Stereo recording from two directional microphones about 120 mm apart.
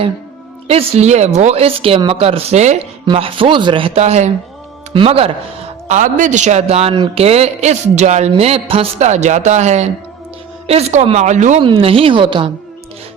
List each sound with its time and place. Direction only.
0.7 s speech: 55° right (ahead or behind)
3.1 s speech: 50° right (ahead or behind); by 4.3 s 65° right (ahead or behind)
4.9 s speech: 55° right (ahead or behind)
5.9 s speech: 90° right; by 8.3 s 70° right (ahead or behind)
8.4 s speech: 55° right (ahead or behind); by 11.6 s 85° right
11.6 s speech: 50° right (ahead or behind)